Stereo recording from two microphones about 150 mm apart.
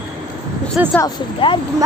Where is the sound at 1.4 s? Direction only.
35° left (ahead or behind).